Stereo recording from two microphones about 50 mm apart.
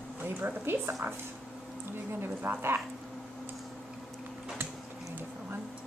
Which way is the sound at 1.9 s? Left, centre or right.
Right.